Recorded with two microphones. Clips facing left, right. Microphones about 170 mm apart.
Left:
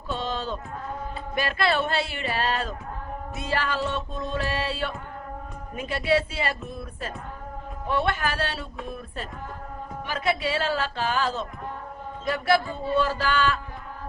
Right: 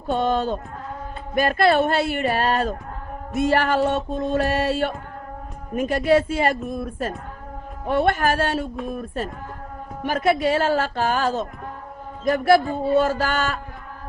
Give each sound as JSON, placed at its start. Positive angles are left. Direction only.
{"t": 0.1, "sound": "music", "side_deg": -55}